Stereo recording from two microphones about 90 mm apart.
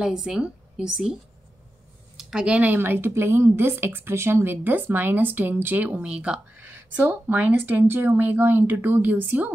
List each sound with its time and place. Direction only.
0.0 s speech: 5° right (ahead or behind)
2.1 s a woman's voice: 10° right (ahead or behind)
5.9 s speech: 10° right (ahead or behind)
6.6 s a woman's voice: 25° right (ahead or behind)